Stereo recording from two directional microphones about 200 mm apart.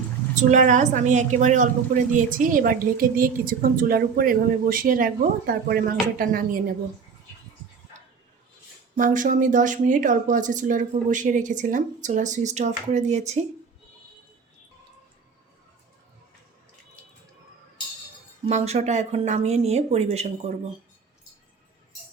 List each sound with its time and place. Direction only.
0.3 s a woman's voice: 40° right (ahead or behind)
9.0 s speech: 40° right (ahead or behind)
18.4 s speech: 30° right (ahead or behind)